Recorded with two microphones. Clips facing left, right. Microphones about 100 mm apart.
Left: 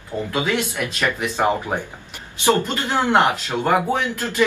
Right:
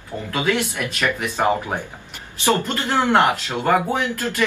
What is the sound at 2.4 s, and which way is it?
Speech, 15° left (ahead or behind).